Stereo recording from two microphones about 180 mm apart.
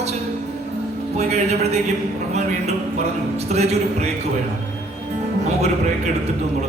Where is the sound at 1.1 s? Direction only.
35° right (ahead or behind).